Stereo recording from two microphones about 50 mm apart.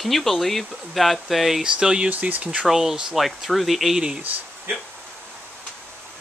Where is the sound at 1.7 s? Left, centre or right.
Centre.